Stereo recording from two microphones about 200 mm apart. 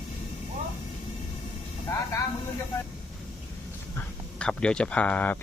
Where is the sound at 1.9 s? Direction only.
15° left (ahead or behind).